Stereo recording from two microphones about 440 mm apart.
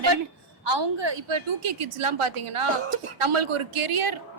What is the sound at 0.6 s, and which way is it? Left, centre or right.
A woman's voice, right.